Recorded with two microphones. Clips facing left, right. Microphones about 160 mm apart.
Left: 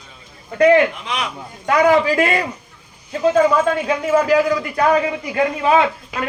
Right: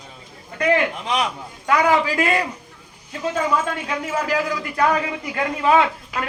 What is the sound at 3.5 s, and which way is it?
A man's voice, 35° left (ahead or behind).